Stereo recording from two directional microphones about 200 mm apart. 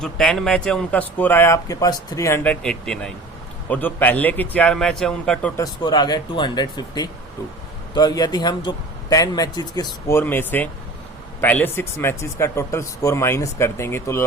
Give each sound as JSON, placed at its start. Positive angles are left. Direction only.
{"t": 0.0, "sound": "speech", "side_deg": 5}
{"t": 5.6, "sound": "a man's voice", "side_deg": 20}